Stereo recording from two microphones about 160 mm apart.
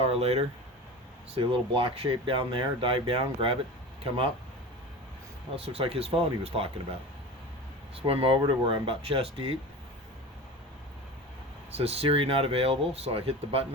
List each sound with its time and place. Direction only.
0.0 s speech: 40° right (ahead or behind)
5.6 s speech: 40° right (ahead or behind)
7.9 s speech: 35° right (ahead or behind)
11.8 s speech: 40° right (ahead or behind)